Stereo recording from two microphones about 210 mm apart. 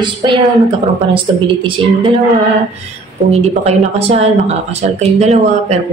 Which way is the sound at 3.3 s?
30° right (ahead or behind).